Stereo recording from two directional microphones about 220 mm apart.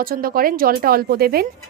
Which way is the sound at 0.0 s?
40° right (ahead or behind).